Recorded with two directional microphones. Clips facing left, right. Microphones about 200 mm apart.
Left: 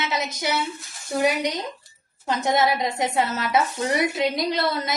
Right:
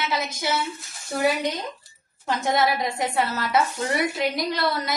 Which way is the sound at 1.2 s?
20° left (ahead or behind).